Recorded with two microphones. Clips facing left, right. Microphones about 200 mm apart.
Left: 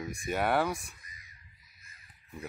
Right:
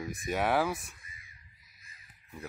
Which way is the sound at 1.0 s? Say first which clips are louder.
Right 1 dB; 40° left (ahead or behind).